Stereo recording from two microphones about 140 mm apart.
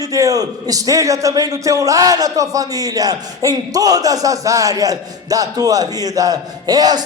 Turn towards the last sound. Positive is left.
turn(degrees=-30)  # may be behind; listen again after turning